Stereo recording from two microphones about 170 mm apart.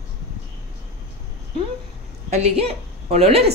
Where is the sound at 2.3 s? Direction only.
40° right (ahead or behind).